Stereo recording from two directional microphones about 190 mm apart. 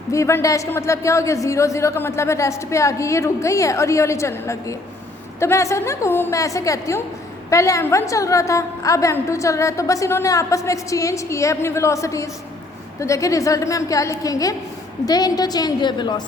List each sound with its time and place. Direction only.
0.1 s a woman's voice: 15° left (ahead or behind)